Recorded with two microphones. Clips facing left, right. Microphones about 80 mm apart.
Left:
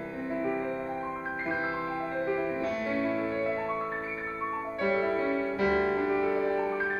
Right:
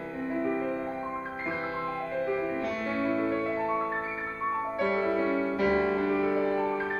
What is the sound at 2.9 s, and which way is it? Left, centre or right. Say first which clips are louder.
Music: right 3 dB; right.